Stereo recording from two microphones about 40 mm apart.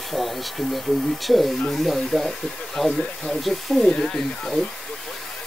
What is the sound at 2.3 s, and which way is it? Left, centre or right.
Speech, centre.